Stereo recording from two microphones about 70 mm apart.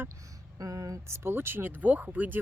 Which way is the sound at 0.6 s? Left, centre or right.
Right.